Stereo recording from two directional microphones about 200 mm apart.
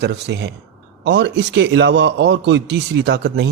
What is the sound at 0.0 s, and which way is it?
Speech, 60° right (ahead or behind).